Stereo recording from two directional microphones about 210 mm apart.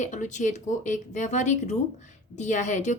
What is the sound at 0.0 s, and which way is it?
Speech, 35° left (ahead or behind).